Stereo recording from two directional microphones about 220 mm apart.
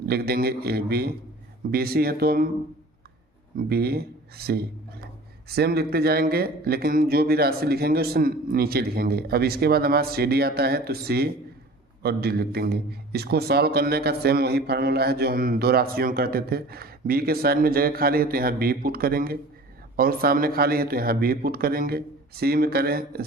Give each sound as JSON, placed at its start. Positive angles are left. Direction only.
{"t": 0.0, "sound": "a man's voice", "side_deg": -45}
{"t": 3.7, "sound": "a man's voice", "side_deg": -45}